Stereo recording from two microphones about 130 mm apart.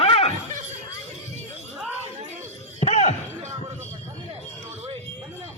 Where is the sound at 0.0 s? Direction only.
45° left (ahead or behind).